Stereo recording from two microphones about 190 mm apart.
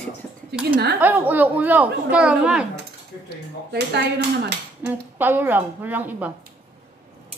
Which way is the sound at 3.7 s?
60° right (ahead or behind).